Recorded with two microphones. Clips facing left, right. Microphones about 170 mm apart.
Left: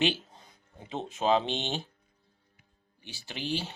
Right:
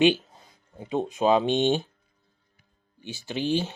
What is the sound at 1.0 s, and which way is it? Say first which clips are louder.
Speech: right 4 dB; 15° right (ahead or behind).